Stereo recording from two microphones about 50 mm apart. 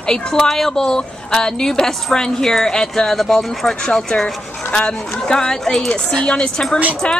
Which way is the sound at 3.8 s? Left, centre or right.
Centre.